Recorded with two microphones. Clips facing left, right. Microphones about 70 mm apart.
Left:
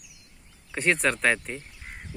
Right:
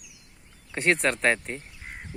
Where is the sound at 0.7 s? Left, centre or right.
Centre.